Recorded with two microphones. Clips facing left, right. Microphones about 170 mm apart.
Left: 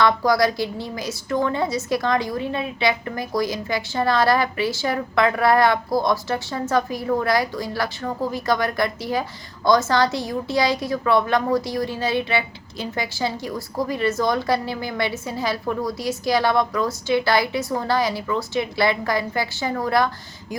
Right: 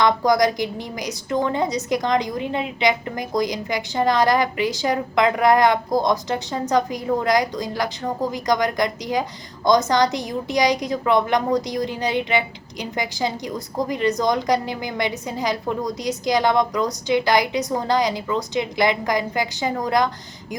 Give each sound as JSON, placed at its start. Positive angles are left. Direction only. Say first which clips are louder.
{"t": 0.0, "sound": "a woman's voice", "louder": "right 1 dB", "side_deg": -20}